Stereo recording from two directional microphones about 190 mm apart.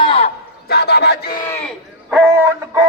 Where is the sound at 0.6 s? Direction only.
55° left (ahead or behind).